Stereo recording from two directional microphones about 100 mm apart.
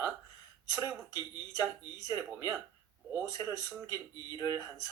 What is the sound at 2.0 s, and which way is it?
Speech, 30° right (ahead or behind).